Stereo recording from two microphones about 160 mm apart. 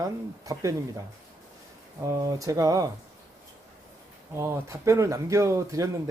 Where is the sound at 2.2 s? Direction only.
20° right (ahead or behind).